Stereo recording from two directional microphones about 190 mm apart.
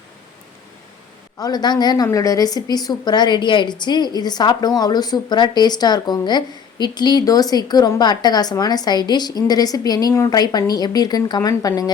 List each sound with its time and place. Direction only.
1.4 s a woman's voice: 20° left (ahead or behind)